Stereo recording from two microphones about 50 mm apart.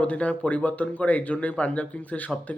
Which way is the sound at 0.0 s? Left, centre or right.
Left.